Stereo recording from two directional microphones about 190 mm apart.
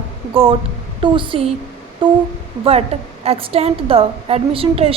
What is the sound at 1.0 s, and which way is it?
A woman's voice, 25° right (ahead or behind).